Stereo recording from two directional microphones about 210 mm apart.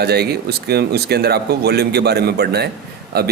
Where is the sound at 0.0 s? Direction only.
50° right (ahead or behind).